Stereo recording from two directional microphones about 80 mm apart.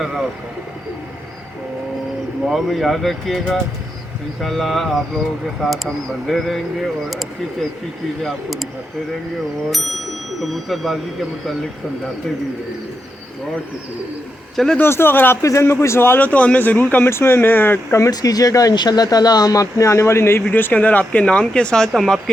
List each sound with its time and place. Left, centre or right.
2.5 s speech: centre
8.2 s speech: centre
9.6 s speech: centre
14.5 s speech: centre
14.8 s a man's voice: left
15.4 s a man's voice: left
18.1 s a man's voice: left; by 22.2 s centre